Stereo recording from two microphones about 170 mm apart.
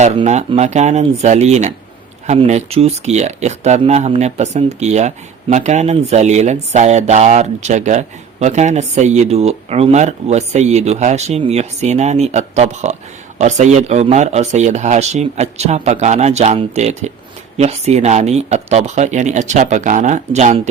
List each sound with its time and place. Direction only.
0.3 s speech: 40° right (ahead or behind)